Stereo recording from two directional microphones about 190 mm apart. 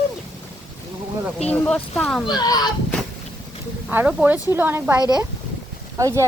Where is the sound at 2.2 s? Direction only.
20° left (ahead or behind).